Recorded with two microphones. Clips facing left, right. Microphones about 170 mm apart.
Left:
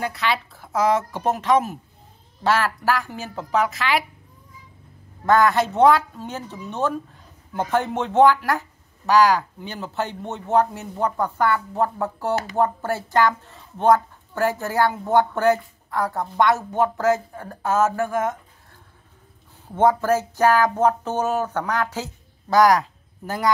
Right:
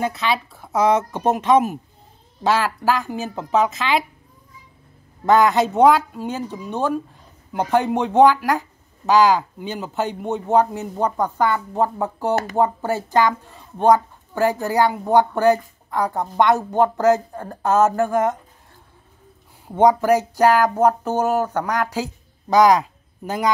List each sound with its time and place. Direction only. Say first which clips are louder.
0.0 s speech: right 3 dB; 20° right (ahead or behind)
5.2 s a woman's voice: right 2 dB; 20° right (ahead or behind)
19.7 s a woman's voice: right 3 dB; 15° right (ahead or behind)